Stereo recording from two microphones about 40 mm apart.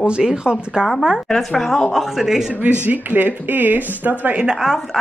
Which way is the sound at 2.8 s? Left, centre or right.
Right.